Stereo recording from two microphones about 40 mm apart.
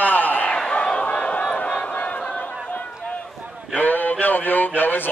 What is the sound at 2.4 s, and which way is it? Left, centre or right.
Run, left.